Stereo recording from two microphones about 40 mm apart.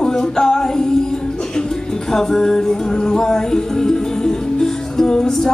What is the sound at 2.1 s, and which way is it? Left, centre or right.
Music, centre.